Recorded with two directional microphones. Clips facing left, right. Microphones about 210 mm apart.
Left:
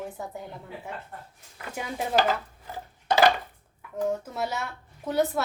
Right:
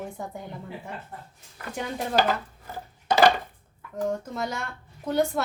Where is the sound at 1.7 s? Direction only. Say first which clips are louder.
Even; 5° left (ahead or behind).